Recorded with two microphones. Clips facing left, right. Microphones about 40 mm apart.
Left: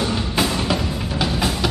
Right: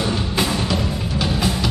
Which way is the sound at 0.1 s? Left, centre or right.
Centre.